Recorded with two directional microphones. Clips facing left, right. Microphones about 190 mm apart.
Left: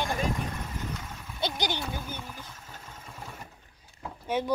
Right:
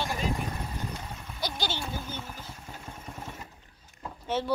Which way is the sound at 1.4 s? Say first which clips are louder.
Left 3 dB; 15° left (ahead or behind).